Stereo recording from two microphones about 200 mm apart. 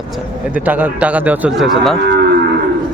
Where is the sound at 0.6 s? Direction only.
10° right (ahead or behind).